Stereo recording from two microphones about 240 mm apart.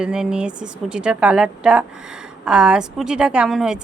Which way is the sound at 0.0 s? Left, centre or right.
Centre.